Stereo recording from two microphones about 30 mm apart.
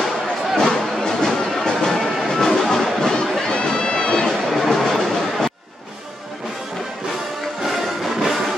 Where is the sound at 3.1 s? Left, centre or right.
Left.